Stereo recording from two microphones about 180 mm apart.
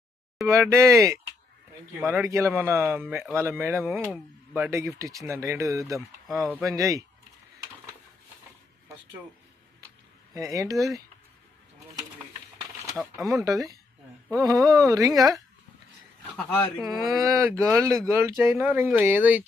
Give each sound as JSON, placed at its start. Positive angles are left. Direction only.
{"t": 0.4, "sound": "speech", "side_deg": -15}
{"t": 10.3, "sound": "speech", "side_deg": -20}
{"t": 13.2, "sound": "speech", "side_deg": -20}
{"t": 16.5, "sound": "speech", "side_deg": 10}
{"t": 16.8, "sound": "speech", "side_deg": -20}